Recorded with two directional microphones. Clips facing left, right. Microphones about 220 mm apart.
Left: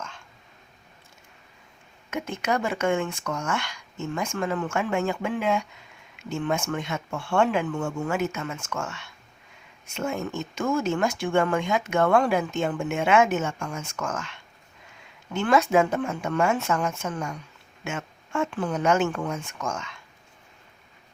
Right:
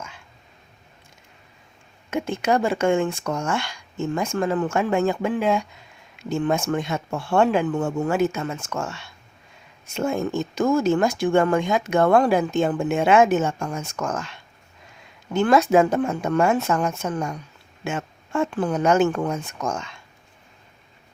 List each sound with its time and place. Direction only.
2.0 s speech: 30° right (ahead or behind)